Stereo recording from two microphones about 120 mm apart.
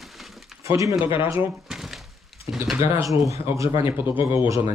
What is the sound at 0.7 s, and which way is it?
Speech, 25° right (ahead or behind).